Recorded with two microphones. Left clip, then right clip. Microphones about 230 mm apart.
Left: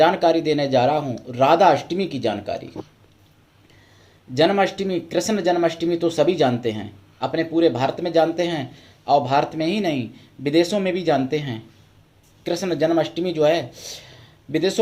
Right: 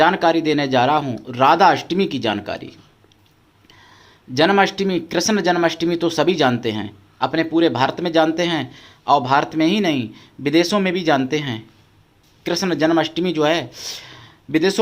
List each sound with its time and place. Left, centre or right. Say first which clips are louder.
0.0 s speech: right 1 dB; centre
4.4 s speech: right 3 dB; centre